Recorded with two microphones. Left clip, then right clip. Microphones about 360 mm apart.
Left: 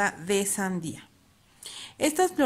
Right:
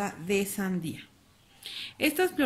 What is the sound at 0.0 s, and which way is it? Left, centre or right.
A woman's voice, left.